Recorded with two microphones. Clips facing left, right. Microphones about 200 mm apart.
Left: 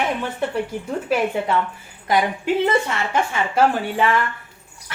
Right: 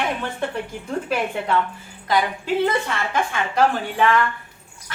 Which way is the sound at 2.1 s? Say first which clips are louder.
Left 2 dB; 20° left (ahead or behind).